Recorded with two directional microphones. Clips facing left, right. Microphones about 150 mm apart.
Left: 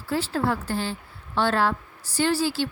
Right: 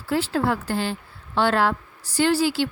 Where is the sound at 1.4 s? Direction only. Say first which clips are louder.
Right 2 dB; 80° right.